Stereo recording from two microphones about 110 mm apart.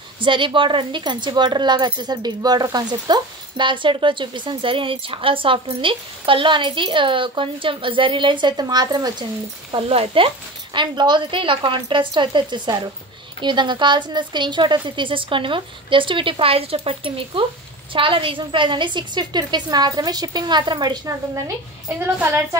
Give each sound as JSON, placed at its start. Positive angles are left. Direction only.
{"t": 0.2, "sound": "speech", "side_deg": -50}
{"t": 9.7, "sound": "a woman's voice", "side_deg": -60}
{"t": 21.8, "sound": "a woman's voice", "side_deg": -20}